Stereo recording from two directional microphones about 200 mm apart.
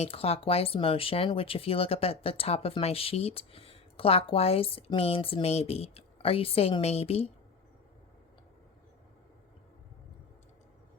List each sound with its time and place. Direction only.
0.0 s speech: 30° left (ahead or behind)